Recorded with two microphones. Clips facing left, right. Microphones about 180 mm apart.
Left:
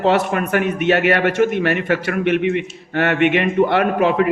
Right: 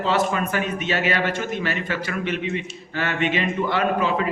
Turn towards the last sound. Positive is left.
turn(degrees=60)  # may be behind; listen again after turning